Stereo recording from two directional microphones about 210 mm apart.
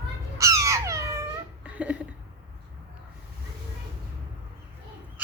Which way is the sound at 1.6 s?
5° right (ahead or behind).